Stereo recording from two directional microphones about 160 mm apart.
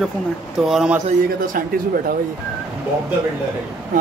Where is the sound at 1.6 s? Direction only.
60° right (ahead or behind).